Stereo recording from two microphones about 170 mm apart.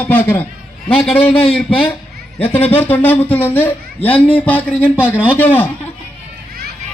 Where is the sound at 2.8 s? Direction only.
10° left (ahead or behind).